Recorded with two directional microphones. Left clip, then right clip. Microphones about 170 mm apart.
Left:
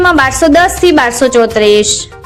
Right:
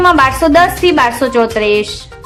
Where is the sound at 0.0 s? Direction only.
25° left (ahead or behind).